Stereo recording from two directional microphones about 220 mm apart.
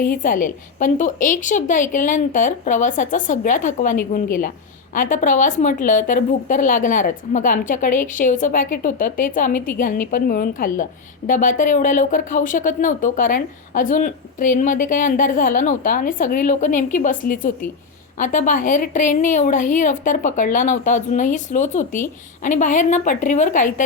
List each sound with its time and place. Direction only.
0.0 s speech: 40° left (ahead or behind)